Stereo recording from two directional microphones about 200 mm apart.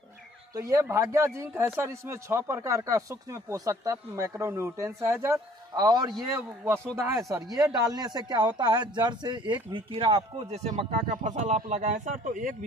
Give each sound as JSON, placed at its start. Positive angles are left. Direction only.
{"t": 0.6, "sound": "speech", "side_deg": -15}